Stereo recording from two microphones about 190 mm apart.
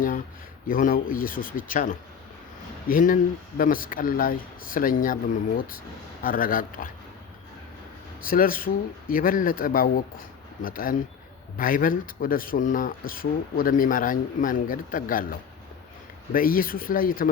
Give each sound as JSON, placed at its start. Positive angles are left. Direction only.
{"t": 0.7, "sound": "speech", "side_deg": 45}
{"t": 8.2, "sound": "speech", "side_deg": 50}